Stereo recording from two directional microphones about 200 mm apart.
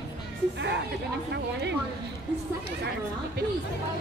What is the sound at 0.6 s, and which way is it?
A woman's voice, 60° right (ahead or behind).